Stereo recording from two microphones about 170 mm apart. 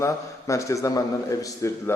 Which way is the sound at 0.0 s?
20° left (ahead or behind).